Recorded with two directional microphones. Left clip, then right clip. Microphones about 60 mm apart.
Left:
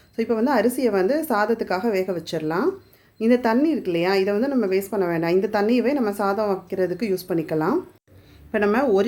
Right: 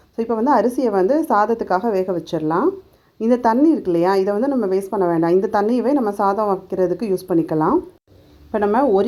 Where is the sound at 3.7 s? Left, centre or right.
Right.